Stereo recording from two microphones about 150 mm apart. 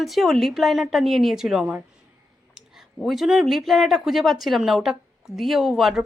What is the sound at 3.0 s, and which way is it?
Speech, centre (ahead or behind).